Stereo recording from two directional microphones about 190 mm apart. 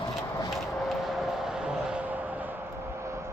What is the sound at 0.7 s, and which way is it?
Vehicle, centre (ahead or behind).